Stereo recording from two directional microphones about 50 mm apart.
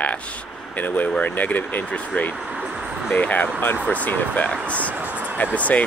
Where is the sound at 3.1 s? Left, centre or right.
Left.